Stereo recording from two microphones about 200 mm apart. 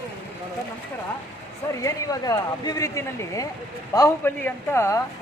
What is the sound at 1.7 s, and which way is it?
Speech, 15° left (ahead or behind).